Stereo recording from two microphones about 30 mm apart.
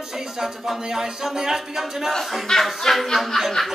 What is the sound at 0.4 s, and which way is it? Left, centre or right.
Speech, centre.